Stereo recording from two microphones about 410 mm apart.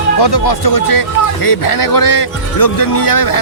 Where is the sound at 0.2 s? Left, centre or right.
Left.